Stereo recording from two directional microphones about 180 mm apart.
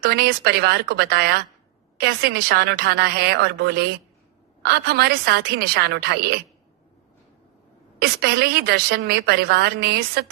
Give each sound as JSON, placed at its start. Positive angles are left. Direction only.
{"t": 0.0, "sound": "a woman's voice", "side_deg": -60}
{"t": 7.9, "sound": "a woman's voice", "side_deg": -65}